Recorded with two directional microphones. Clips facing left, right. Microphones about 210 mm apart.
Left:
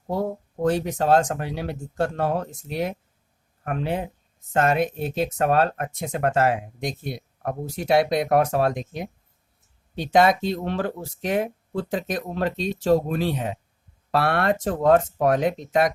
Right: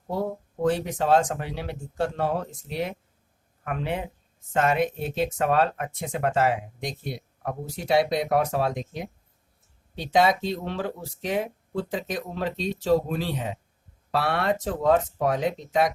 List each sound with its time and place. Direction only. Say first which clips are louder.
0.6 s speech: left 2 dB; 45° left (ahead or behind)
10.0 s speech: left 3 dB; 50° left (ahead or behind)